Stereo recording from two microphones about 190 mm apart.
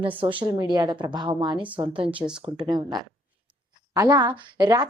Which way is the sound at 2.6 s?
20° right (ahead or behind).